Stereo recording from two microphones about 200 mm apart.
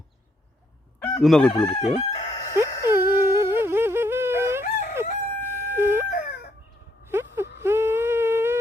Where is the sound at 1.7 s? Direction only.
30° left (ahead or behind).